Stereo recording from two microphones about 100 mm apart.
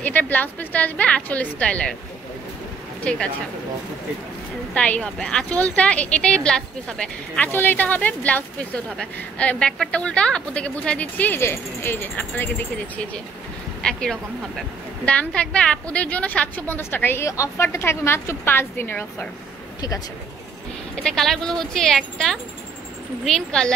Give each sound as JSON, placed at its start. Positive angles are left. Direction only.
{"t": 0.0, "sound": "a woman's voice", "side_deg": 15}
{"t": 3.0, "sound": "speech", "side_deg": 10}
{"t": 4.7, "sound": "a woman's voice", "side_deg": 10}
{"t": 15.0, "sound": "a woman's voice", "side_deg": 10}
{"t": 20.9, "sound": "a woman's voice", "side_deg": 5}